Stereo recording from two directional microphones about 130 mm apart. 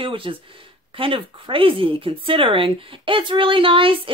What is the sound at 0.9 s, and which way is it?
Speech, 45° right (ahead or behind).